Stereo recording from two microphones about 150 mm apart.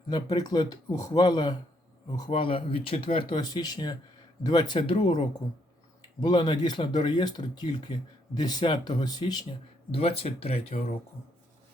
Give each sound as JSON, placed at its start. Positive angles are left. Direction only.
{"t": 0.1, "sound": "speech", "side_deg": 30}
{"t": 9.9, "sound": "speech", "side_deg": 40}